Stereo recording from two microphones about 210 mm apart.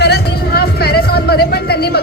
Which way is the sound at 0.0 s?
50° left (ahead or behind).